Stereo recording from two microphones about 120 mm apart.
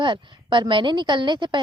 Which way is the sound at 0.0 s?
40° right (ahead or behind).